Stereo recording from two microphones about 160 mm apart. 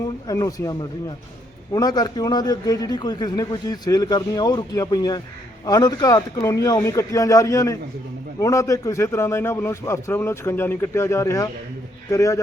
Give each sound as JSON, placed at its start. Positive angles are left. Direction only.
{"t": 0.3, "sound": "a man's voice", "side_deg": 20}